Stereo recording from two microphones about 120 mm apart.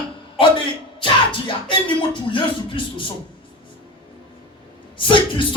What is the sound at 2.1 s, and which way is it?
Speech, 45° left (ahead or behind).